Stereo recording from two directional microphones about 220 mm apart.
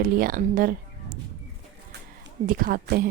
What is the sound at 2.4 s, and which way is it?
Speech, 40° right (ahead or behind).